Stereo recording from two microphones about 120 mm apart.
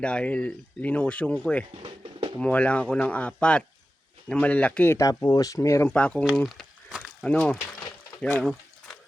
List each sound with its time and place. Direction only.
0.0 s speech: 10° left (ahead or behind)
1.7 s drum: 45° right (ahead or behind)
2.4 s speech: 10° left (ahead or behind)
4.9 s speech: 30° left (ahead or behind)
5.9 s speech: 10° left (ahead or behind)
6.2 s crumpling: centre (ahead or behind)
7.2 s a sound: 10° left (ahead or behind)